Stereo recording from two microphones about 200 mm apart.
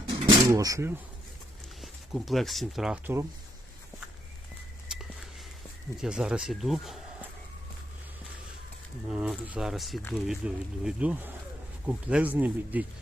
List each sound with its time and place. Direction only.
0.1 s a sound: 15° right (ahead or behind)
1.8 s speech: centre (ahead or behind)
6.0 s speech: 5° right (ahead or behind)
9.0 s speech: 5° right (ahead or behind)